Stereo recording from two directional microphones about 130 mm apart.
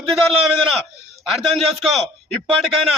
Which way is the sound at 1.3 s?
Centre (ahead or behind).